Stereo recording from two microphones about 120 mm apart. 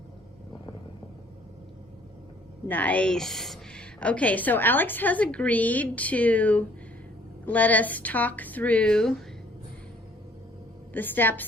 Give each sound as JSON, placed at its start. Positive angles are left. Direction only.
{"t": 2.6, "sound": "a woman's voice", "side_deg": 15}
{"t": 10.9, "sound": "a woman's voice", "side_deg": 15}